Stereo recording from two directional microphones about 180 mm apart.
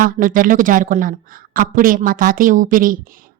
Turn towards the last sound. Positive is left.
turn(degrees=-50)  # may be behind; listen again after turning